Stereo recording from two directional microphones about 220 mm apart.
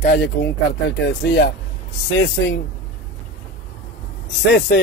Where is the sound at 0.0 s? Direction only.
50° left (ahead or behind).